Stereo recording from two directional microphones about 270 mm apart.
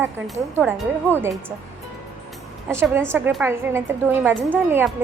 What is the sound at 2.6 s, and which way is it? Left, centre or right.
A woman's voice, centre.